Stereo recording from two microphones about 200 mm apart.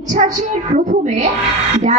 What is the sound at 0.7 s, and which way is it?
Speech, 35° right (ahead or behind).